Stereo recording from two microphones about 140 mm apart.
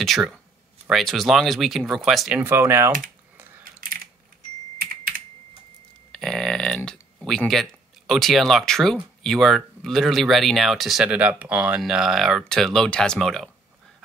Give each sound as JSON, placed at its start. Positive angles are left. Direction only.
{"t": 0.0, "sound": "speech", "side_deg": 0}
{"t": 3.6, "sound": "typing", "side_deg": -90}
{"t": 4.7, "sound": "computer keyboard", "side_deg": -90}
{"t": 6.1, "sound": "burping", "side_deg": 5}
{"t": 8.1, "sound": "speech", "side_deg": 0}